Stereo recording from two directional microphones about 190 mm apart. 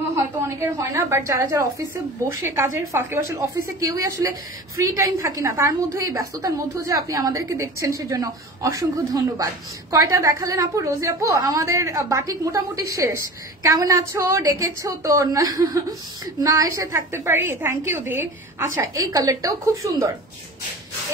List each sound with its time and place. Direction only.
0.1 s a woman's voice: 15° right (ahead or behind)
15.5 s chuckle: 20° right (ahead or behind)
16.3 s a woman's voice: 20° right (ahead or behind)